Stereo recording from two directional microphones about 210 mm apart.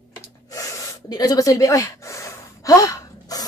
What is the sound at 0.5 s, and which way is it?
Gasp, 15° left (ahead or behind).